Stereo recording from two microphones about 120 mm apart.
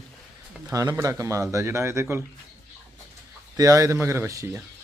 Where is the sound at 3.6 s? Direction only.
25° right (ahead or behind).